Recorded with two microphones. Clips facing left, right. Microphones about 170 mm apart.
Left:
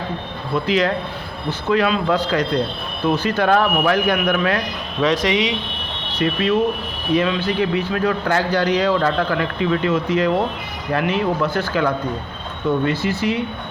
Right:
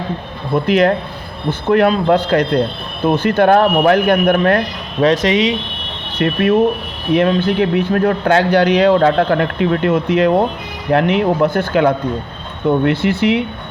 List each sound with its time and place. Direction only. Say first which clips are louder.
0.5 s a man's voice: right 6 dB; 55° right (ahead or behind)
5.1 s speech: right 4 dB; 25° right (ahead or behind)
6.1 s speech: right 5 dB; 60° right (ahead or behind)